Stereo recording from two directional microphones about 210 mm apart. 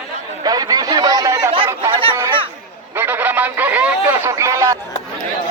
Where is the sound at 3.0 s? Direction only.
10° right (ahead or behind).